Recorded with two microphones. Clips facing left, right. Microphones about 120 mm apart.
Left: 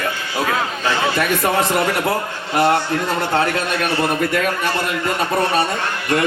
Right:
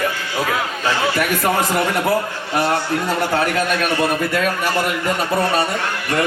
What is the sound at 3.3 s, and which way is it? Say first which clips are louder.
A man's voice: even; 25° left (ahead or behind).